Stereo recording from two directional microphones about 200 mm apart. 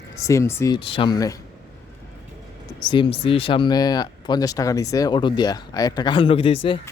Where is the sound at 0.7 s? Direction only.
25° left (ahead or behind).